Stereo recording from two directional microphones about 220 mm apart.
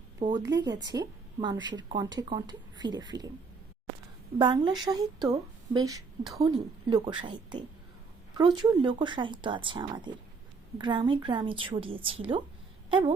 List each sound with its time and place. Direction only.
0.2 s a woman's voice: 20° right (ahead or behind)
4.4 s a woman's voice: 20° right (ahead or behind)
12.9 s a sound: 20° right (ahead or behind)